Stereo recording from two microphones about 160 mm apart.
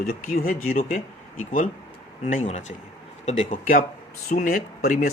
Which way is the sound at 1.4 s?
55° left (ahead or behind).